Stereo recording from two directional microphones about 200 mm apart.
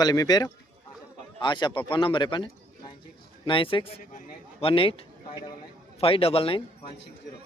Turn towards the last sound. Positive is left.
turn(degrees=25)  # may be behind; listen again after turning